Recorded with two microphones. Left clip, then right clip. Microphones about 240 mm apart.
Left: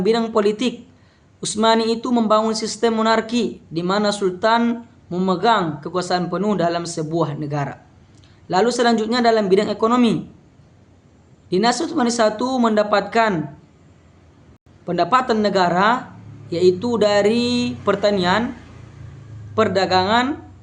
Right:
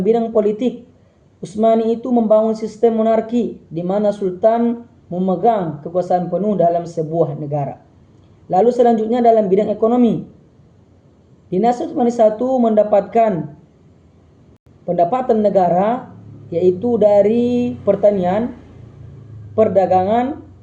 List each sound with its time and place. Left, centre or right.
0.0 s a man's voice: centre
11.5 s a man's voice: centre
14.8 s a man's voice: centre
19.5 s a man's voice: centre